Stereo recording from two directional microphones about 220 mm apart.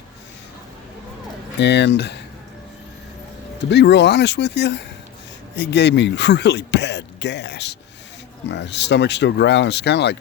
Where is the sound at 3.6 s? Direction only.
50° left (ahead or behind).